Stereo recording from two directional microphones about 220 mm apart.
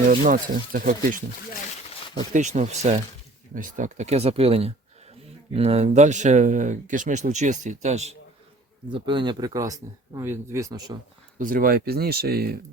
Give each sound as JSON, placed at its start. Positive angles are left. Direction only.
{"t": 0.1, "sound": "speech", "side_deg": -40}
{"t": 2.3, "sound": "speech", "side_deg": -30}
{"t": 11.3, "sound": "speech", "side_deg": -40}